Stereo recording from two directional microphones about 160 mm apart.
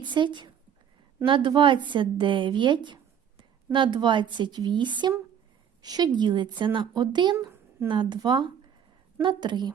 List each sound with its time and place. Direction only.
0.0 s a woman's voice: 30° right (ahead or behind)